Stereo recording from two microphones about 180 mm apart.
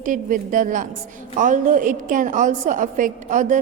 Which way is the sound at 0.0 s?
45° right (ahead or behind).